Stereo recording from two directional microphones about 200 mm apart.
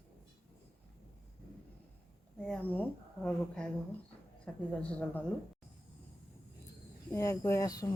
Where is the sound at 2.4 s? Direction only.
5° left (ahead or behind).